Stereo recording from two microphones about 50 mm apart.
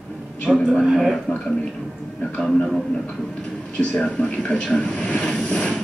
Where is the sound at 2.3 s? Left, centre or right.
Centre.